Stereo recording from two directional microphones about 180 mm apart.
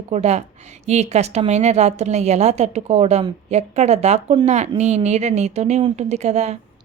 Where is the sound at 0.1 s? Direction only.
35° right (ahead or behind).